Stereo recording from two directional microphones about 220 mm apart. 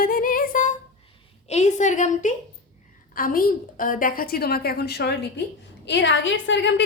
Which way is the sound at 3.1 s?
40° left (ahead or behind).